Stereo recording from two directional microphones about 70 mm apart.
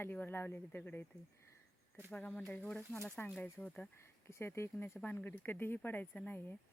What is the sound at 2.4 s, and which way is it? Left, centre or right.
Speech, left.